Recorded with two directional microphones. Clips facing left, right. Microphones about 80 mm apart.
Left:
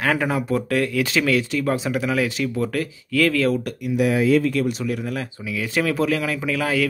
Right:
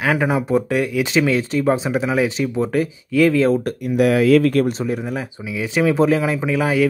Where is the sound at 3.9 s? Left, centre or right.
Right.